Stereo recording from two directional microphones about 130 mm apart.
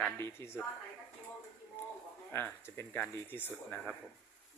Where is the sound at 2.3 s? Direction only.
20° left (ahead or behind).